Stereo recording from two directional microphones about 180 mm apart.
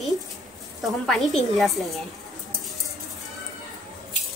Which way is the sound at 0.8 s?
Centre (ahead or behind).